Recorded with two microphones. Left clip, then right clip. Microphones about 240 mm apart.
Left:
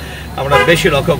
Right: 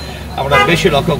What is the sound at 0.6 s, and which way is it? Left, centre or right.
Speech, left.